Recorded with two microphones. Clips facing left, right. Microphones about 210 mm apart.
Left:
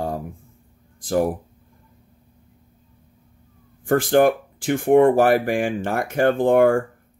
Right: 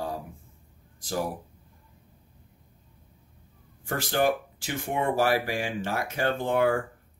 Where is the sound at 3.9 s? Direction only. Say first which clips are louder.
Left 9 dB; 50° left (ahead or behind).